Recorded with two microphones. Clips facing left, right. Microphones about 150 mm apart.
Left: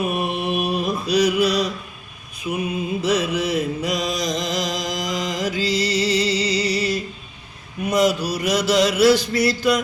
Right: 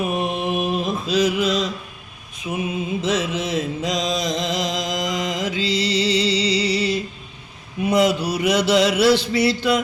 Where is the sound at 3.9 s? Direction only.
20° right (ahead or behind).